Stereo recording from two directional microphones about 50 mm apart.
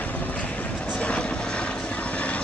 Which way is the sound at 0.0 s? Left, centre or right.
Left.